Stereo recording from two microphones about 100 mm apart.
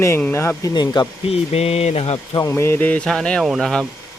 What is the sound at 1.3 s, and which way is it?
Speech, 90° left.